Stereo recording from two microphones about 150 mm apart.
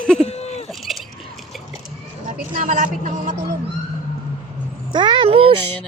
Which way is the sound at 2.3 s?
60° right (ahead or behind).